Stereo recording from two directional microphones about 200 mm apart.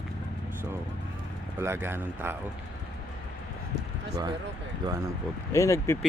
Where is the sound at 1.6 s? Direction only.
10° right (ahead or behind).